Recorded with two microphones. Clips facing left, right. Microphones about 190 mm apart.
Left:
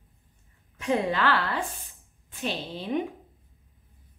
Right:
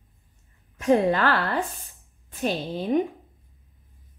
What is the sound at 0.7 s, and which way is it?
A woman's voice, 45° right (ahead or behind).